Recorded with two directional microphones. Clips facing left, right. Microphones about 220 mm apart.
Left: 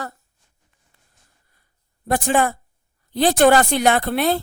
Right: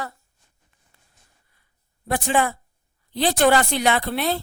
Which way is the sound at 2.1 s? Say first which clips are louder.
Left 3 dB; 45° left (ahead or behind).